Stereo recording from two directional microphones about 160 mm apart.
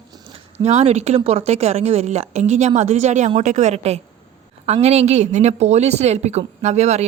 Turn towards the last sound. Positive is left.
turn(degrees=-45)  # may be behind; listen again after turning